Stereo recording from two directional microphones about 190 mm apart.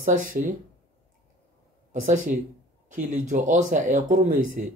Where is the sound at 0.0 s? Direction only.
45° right (ahead or behind).